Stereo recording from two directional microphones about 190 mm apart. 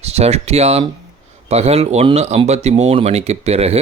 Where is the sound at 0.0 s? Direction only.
35° right (ahead or behind).